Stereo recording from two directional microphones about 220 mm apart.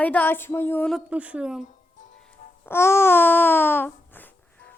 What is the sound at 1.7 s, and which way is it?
Music, 35° left (ahead or behind).